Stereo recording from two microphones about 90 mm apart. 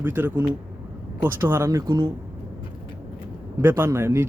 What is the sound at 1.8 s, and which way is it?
Speech, 45° right (ahead or behind).